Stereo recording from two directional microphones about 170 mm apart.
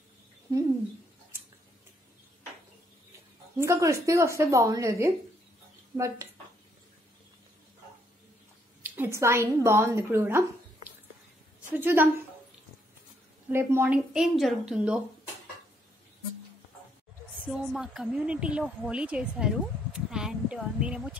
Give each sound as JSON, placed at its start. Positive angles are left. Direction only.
{"t": 3.5, "sound": "speech", "side_deg": -15}
{"t": 8.8, "sound": "speech", "side_deg": -10}
{"t": 11.7, "sound": "speech", "side_deg": -10}
{"t": 13.5, "sound": "speech", "side_deg": -15}
{"t": 17.5, "sound": "a woman's voice", "side_deg": -5}